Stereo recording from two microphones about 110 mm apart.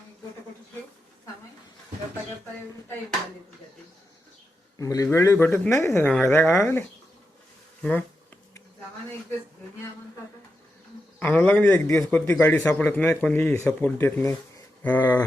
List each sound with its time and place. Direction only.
4.8 s a man's voice: 30° left (ahead or behind)
7.8 s speech: 10° left (ahead or behind)
11.2 s a man's voice: 15° left (ahead or behind)